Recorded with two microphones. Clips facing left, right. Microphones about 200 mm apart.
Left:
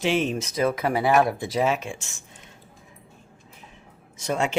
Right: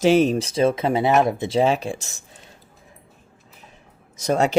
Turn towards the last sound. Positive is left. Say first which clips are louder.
# right 6 dB
turn(degrees=-40)  # may be behind; listen again after turning